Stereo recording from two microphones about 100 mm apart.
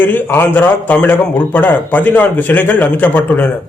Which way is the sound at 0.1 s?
20° left (ahead or behind).